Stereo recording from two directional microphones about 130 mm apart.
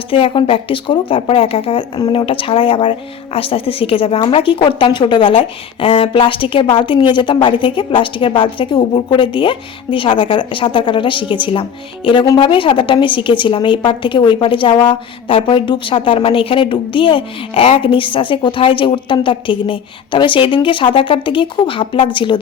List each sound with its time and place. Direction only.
0.1 s a woman's voice: 45° left (ahead or behind)